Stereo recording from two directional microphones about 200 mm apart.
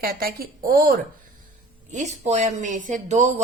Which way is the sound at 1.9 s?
35° right (ahead or behind).